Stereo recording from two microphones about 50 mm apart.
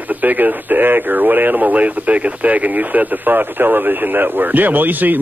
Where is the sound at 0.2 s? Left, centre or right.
Right.